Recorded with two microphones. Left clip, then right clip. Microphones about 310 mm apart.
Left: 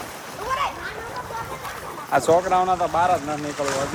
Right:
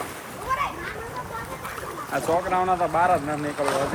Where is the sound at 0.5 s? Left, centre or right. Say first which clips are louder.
Left 1 dB; left.